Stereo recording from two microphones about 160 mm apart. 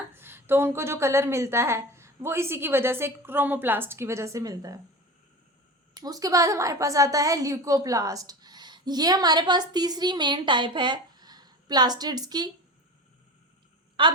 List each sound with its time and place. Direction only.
0.1 s a woman's voice: 15° right (ahead or behind)
5.9 s a woman's voice: 25° right (ahead or behind)
14.0 s a woman's voice: 30° right (ahead or behind)